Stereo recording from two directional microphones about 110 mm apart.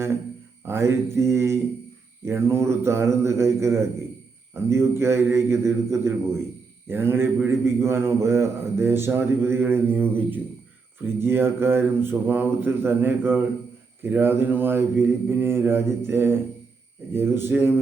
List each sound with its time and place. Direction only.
0.7 s a man's voice: 25° right (ahead or behind)